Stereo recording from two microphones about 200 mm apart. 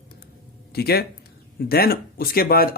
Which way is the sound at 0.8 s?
50° left (ahead or behind).